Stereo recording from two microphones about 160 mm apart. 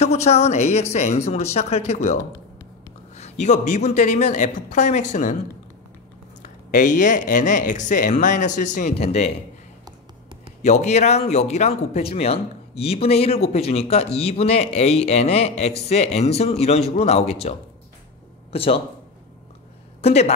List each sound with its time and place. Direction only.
0.0 s a woman's voice: 40° left (ahead or behind)
3.2 s speech: 45° left (ahead or behind)
6.4 s speech: 55° left (ahead or behind)
10.6 s a man's voice: 45° left (ahead or behind)
20.0 s speech: 40° left (ahead or behind)